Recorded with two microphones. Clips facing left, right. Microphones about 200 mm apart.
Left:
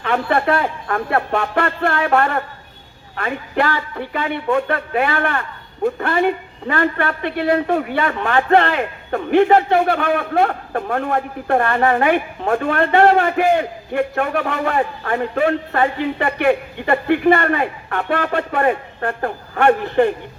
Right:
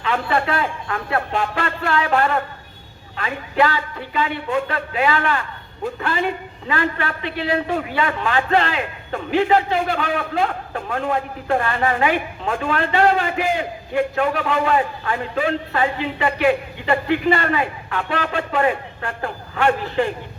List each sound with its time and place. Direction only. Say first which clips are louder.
0.0 s speech: left 3 dB; 60° left (ahead or behind)